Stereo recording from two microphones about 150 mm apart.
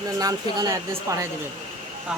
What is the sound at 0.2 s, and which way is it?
Speech, 25° right (ahead or behind).